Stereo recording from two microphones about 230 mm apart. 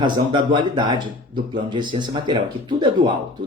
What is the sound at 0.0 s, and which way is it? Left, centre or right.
Speech, centre.